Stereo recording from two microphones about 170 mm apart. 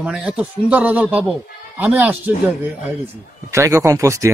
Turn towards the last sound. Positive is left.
turn(degrees=-20)  # may be behind; listen again after turning